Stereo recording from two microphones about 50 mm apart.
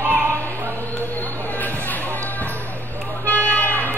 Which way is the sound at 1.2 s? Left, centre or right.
Left.